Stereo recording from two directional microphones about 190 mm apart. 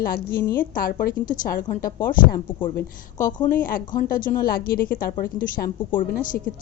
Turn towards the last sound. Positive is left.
turn(degrees=45)  # may be behind; listen again after turning